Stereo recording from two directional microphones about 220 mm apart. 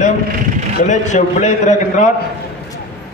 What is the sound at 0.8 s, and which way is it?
A man's voice, 30° left (ahead or behind).